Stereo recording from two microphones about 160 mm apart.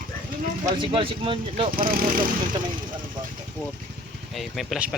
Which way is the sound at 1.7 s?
65° right (ahead or behind).